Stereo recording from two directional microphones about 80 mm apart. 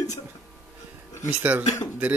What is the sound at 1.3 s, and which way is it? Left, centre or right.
Speech, right.